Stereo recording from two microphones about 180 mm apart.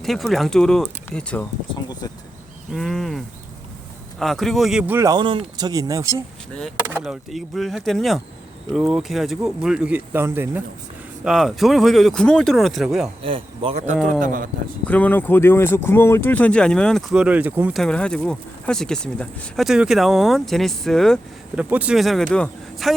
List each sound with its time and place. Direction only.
0.0 s speech: centre (ahead or behind)
1.7 s a sound: 20° left (ahead or behind)
2.7 s speech: centre (ahead or behind); by 6.2 s 15° right (ahead or behind)
6.5 s speech: 5° left (ahead or behind)
13.2 s speech: 30° right (ahead or behind)
14.1 s speech: 50° right (ahead or behind)
14.8 s speech: 10° left (ahead or behind); by 17.8 s 10° right (ahead or behind)
17.8 s speech: 5° left (ahead or behind)